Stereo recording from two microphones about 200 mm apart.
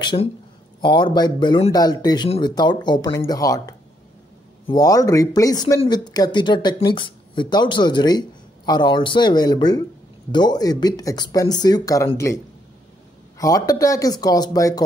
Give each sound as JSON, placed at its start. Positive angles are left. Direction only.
{"t": 0.0, "sound": "speech", "side_deg": 25}
{"t": 13.4, "sound": "speech", "side_deg": 15}